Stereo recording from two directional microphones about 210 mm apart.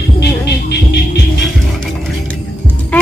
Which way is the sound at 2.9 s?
5° left (ahead or behind).